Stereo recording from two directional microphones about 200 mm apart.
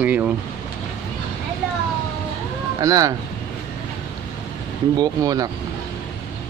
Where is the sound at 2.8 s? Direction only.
15° right (ahead or behind).